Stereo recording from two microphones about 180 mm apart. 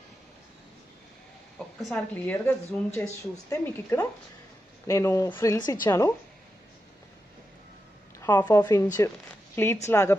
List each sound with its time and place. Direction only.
1.8 s a woman's voice: 5° left (ahead or behind)
8.2 s a sound: 10° left (ahead or behind)
8.5 s speech: 20° left (ahead or behind)
9.8 s a woman's voice: 15° left (ahead or behind)